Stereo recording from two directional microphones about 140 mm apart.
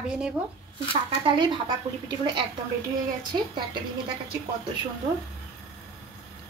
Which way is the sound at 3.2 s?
35° right (ahead or behind).